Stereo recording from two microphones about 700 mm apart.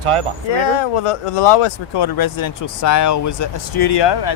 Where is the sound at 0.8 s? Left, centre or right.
Left.